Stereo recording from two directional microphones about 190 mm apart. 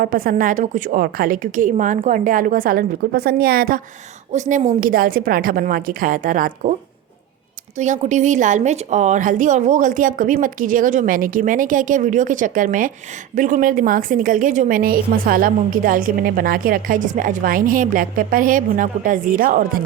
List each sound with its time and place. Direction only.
0.0 s a woman's voice: 50° right (ahead or behind)
4.3 s a woman's voice: 40° right (ahead or behind)
7.8 s a woman's voice: 40° right (ahead or behind)